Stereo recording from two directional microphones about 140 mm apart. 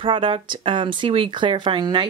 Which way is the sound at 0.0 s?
35° right (ahead or behind).